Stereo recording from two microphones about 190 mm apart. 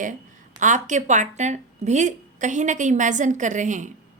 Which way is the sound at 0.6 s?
40° right (ahead or behind).